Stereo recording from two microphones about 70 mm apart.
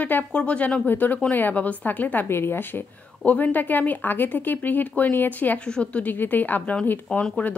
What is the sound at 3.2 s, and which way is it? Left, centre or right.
A woman's voice, left.